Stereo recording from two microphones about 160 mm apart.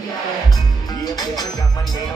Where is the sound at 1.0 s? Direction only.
25° left (ahead or behind).